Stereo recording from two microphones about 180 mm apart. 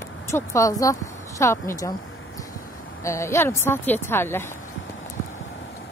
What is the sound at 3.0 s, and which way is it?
Speech, 15° left (ahead or behind).